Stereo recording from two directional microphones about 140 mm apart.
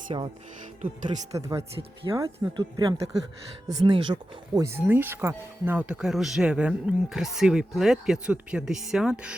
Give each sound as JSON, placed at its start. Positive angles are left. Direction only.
{"t": 0.1, "sound": "speech", "side_deg": -40}
{"t": 0.8, "sound": "speech", "side_deg": -55}
{"t": 1.4, "sound": "speech", "side_deg": -20}
{"t": 4.6, "sound": "speech", "side_deg": -15}